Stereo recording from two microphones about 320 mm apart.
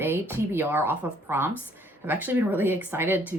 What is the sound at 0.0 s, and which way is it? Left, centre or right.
A woman's voice, centre.